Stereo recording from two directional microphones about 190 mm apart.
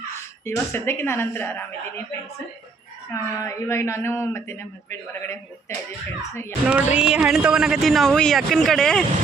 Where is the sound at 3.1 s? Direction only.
15° left (ahead or behind).